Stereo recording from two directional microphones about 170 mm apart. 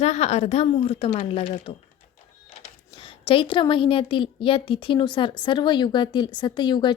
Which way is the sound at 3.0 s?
30° left (ahead or behind).